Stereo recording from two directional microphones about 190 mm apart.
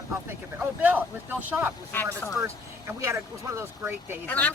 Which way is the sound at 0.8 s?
10° right (ahead or behind).